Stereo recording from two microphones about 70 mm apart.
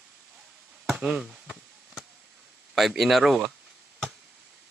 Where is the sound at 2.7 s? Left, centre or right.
Centre.